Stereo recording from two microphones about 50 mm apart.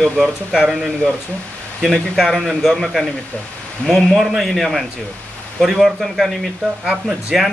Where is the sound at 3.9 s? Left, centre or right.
Centre.